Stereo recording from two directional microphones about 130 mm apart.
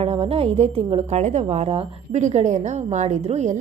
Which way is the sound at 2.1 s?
60° right (ahead or behind).